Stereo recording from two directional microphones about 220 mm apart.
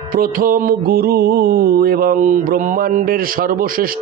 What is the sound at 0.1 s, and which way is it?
Mantra, 40° right (ahead or behind).